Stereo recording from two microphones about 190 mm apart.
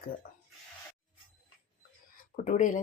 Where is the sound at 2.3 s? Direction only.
40° left (ahead or behind).